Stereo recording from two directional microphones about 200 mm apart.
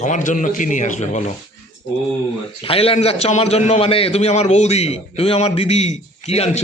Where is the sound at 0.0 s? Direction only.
40° left (ahead or behind).